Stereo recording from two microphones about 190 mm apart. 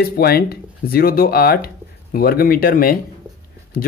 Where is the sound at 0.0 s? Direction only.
55° left (ahead or behind).